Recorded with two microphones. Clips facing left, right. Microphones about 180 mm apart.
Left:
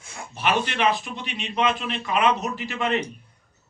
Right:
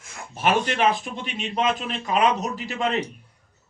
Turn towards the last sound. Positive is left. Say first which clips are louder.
# even
turn(degrees=-35)  # may be behind; listen again after turning